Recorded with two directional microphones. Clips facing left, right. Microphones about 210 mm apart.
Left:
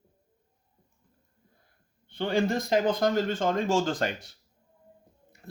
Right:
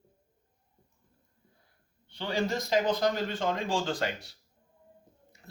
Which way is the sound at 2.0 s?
55° left (ahead or behind).